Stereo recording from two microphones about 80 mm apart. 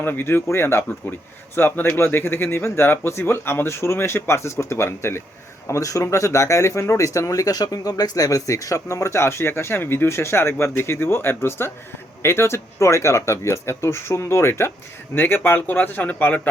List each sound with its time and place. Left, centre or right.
0.0 s speech: left